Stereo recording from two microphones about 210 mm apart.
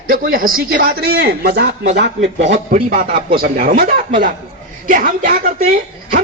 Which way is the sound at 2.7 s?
40° right (ahead or behind).